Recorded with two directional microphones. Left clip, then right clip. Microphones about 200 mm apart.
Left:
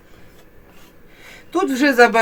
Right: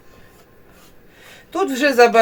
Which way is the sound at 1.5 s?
5° left (ahead or behind).